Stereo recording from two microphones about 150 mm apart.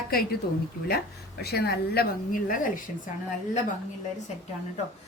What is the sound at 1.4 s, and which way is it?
A woman's voice, 90° left.